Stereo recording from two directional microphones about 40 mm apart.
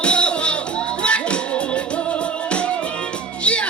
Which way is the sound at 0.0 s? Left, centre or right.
Left.